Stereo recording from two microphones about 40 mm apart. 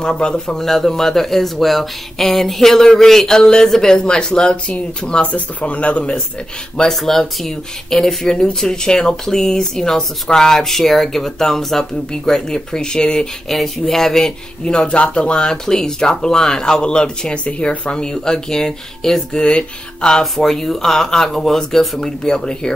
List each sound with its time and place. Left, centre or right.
0.0 s speech: centre
0.6 s speech: centre
5.2 s speech: left
6.9 s speech: centre
13.5 s speech: centre
14.6 s speech: left
15.4 s speech: centre